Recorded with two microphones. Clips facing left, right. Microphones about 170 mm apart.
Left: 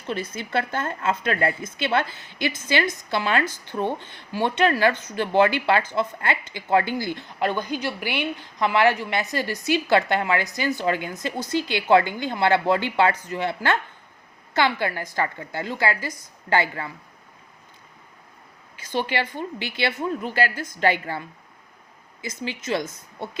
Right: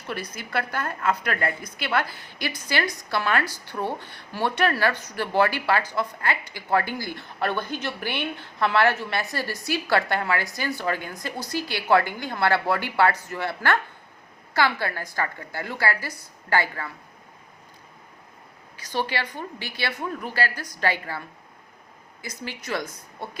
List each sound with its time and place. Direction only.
0.1 s a woman's voice: 25° left (ahead or behind)
19.1 s a woman's voice: 20° left (ahead or behind)
22.2 s a woman's voice: 20° left (ahead or behind)